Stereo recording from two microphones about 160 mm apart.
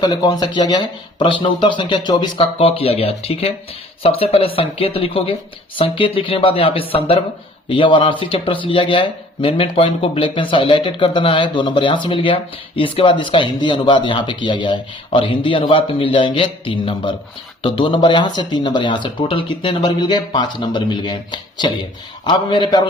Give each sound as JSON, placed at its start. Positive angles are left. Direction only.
{"t": 0.0, "sound": "speech", "side_deg": 25}